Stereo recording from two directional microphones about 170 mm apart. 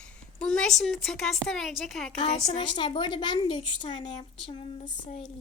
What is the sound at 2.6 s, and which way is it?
A woman's voice, 25° left (ahead or behind).